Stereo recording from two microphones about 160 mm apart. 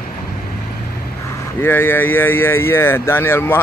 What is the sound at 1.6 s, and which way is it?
Speech, 15° left (ahead or behind).